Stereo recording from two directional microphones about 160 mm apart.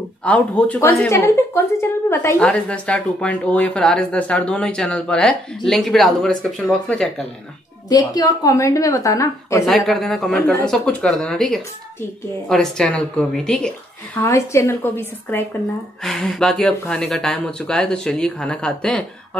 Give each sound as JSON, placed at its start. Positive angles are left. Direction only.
{"t": 0.2, "sound": "a woman's voice", "side_deg": 5}
{"t": 7.9, "sound": "a woman's voice", "side_deg": 20}
{"t": 9.7, "sound": "a woman's voice", "side_deg": 0}
{"t": 16.0, "sound": "speech", "side_deg": 0}